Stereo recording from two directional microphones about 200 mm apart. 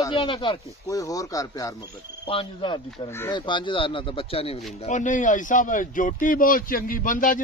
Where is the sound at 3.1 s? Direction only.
10° left (ahead or behind).